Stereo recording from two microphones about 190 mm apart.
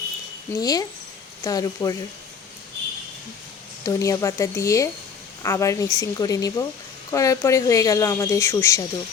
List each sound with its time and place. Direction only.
0.6 s speech: 20° left (ahead or behind)
3.8 s speech: 15° left (ahead or behind)